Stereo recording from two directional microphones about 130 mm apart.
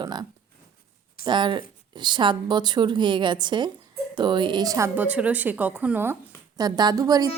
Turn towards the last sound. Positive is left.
turn(degrees=-30)  # may be behind; listen again after turning